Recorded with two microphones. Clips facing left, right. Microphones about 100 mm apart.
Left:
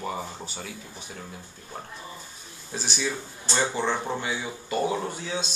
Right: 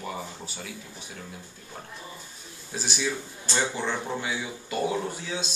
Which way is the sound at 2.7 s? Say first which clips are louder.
Even; 5° right (ahead or behind).